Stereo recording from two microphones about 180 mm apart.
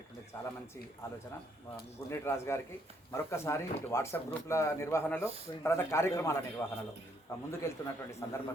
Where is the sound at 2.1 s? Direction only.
15° left (ahead or behind).